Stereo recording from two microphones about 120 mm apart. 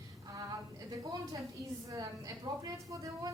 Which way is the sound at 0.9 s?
35° right (ahead or behind).